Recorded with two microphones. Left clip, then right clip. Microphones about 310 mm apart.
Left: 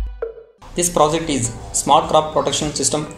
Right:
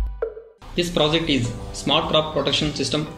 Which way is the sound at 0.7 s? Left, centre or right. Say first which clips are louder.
Left 4 dB; left.